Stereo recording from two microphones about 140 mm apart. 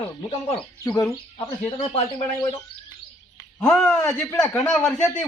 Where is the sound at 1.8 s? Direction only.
45° left (ahead or behind).